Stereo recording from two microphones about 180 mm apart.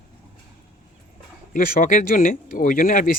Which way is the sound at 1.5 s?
50° left (ahead or behind).